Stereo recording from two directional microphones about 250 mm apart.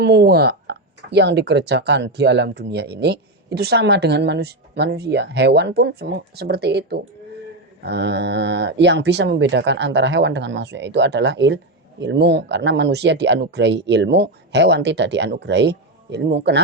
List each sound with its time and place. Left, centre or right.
0.0 s speech: right